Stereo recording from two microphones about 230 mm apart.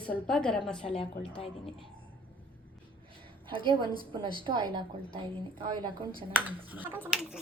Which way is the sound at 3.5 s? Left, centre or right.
Right.